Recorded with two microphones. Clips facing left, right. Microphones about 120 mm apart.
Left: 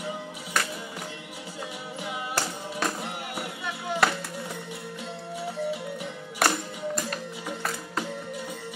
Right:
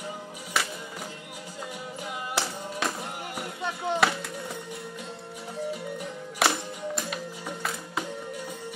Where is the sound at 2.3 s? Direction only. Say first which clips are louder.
Right 2 dB; centre (ahead or behind).